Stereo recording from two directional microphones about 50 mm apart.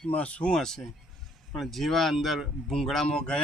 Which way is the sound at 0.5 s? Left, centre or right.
Centre.